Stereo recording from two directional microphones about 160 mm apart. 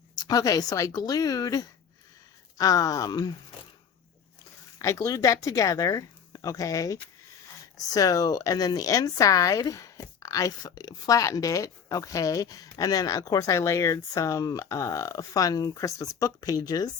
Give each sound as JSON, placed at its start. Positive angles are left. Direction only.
{"t": 0.2, "sound": "a woman's voice", "side_deg": 20}
{"t": 4.8, "sound": "a woman's voice", "side_deg": 20}